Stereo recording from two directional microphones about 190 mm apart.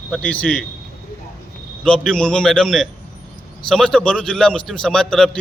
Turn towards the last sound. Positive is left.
turn(degrees=5)  # may be behind; listen again after turning